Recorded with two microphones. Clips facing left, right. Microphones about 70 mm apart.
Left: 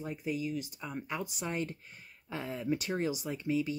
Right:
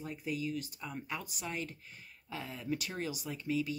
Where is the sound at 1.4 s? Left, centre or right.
Left.